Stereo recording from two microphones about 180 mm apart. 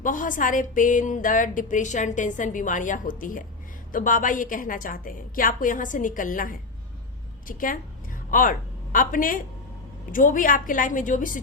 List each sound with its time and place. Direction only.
0.0 s speech: 45° left (ahead or behind)